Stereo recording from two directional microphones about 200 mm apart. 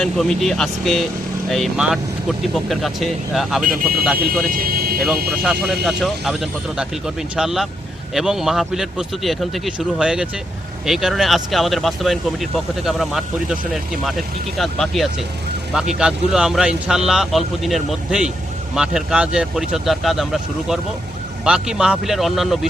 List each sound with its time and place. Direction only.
0.0 s speech: centre (ahead or behind)
4.3 s speech: 45° right (ahead or behind)
4.9 s speech: centre (ahead or behind)